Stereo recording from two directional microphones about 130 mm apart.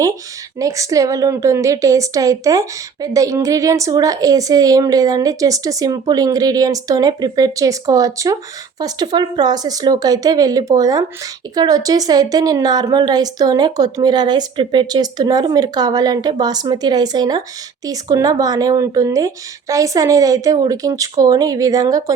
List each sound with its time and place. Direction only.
0.6 s a woman's voice: 25° right (ahead or behind)